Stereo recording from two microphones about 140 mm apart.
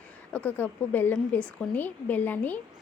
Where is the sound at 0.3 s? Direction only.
10° left (ahead or behind).